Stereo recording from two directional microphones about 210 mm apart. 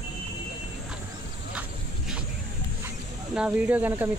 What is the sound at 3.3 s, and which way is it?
Speech, 5° right (ahead or behind).